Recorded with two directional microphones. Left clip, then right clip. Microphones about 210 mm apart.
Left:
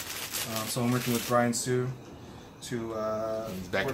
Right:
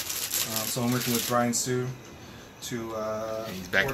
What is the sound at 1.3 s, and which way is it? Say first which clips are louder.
Speech: left 1 dB; 15° left (ahead or behind).